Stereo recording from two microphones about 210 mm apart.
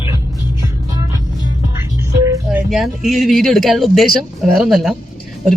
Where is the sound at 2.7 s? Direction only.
Centre (ahead or behind).